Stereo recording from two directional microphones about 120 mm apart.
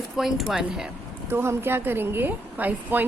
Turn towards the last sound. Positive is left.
turn(degrees=-15)  # may be behind; listen again after turning